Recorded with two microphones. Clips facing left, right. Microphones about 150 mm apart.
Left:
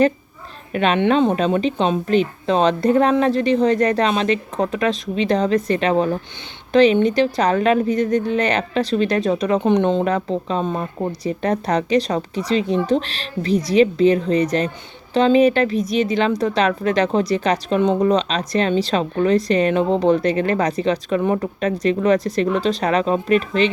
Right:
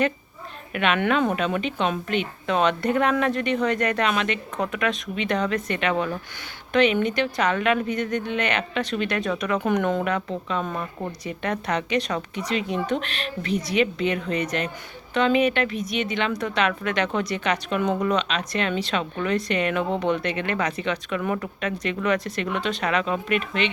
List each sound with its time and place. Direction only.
0.7 s a woman's voice: 35° left (ahead or behind)